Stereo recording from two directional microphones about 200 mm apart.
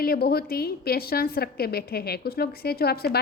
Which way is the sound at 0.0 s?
50° left (ahead or behind).